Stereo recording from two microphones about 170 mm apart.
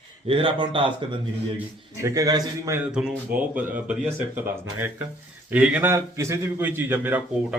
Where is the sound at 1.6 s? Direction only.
20° right (ahead or behind).